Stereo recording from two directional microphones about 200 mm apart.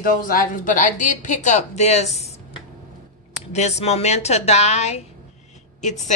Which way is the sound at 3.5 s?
35° left (ahead or behind).